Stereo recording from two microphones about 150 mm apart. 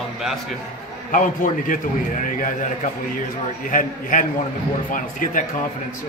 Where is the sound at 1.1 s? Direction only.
60° left (ahead or behind).